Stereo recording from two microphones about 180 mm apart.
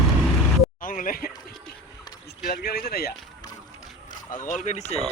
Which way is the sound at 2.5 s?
60° left (ahead or behind).